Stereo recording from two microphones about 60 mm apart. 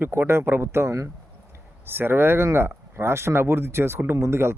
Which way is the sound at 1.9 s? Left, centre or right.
Right.